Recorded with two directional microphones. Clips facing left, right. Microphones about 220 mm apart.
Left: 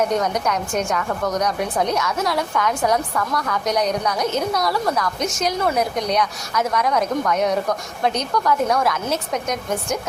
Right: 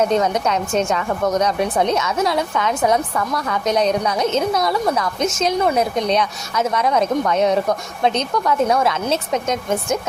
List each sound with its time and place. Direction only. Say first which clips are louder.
0.1 s a woman's voice: right 3 dB; 25° right (ahead or behind)